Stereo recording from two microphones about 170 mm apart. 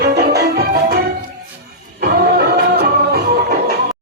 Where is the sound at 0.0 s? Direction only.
70° right (ahead or behind).